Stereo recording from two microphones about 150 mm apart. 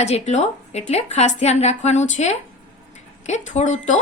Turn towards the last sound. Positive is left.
turn(degrees=50)  # may be behind; listen again after turning